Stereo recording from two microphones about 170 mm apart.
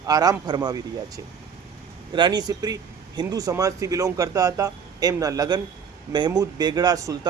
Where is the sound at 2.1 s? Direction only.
25° right (ahead or behind).